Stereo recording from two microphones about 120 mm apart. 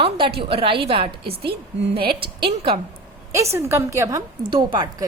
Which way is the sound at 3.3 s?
25° right (ahead or behind).